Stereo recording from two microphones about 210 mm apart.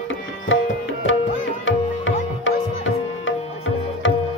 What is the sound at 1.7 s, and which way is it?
Music, 65° left (ahead or behind).